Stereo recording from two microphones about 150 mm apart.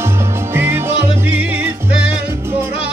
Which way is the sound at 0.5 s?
15° right (ahead or behind).